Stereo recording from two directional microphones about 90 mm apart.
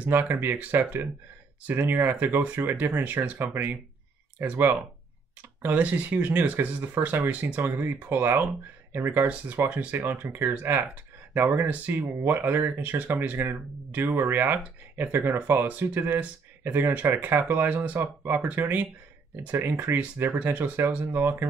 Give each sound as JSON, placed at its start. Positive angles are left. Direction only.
{"t": 0.0, "sound": "speech", "side_deg": -25}